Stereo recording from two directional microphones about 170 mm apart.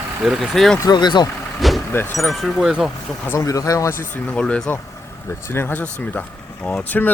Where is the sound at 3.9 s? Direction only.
50° left (ahead or behind).